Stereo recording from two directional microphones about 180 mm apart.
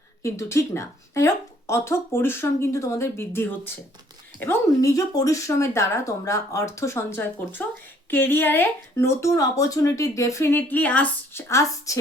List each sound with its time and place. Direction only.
0.2 s speech: 15° left (ahead or behind)